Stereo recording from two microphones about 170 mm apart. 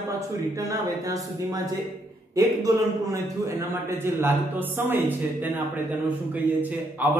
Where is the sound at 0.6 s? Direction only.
20° right (ahead or behind).